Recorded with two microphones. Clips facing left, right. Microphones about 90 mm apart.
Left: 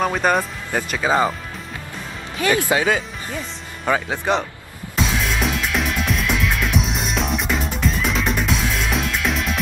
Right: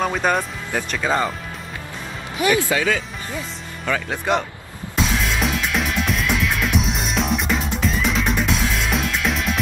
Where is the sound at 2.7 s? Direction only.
30° left (ahead or behind).